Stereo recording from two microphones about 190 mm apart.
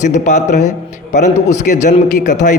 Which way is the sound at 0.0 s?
40° left (ahead or behind).